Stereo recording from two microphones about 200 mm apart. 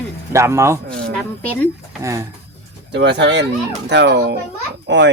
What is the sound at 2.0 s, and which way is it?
Speech, 15° right (ahead or behind).